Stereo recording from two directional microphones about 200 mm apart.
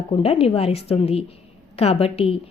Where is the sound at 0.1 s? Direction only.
30° left (ahead or behind).